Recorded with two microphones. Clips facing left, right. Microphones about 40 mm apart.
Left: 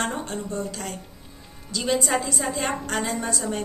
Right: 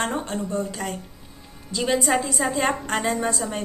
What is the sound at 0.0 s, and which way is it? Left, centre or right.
A woman's voice, centre.